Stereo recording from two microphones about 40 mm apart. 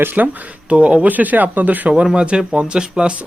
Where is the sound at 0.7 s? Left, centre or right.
Right.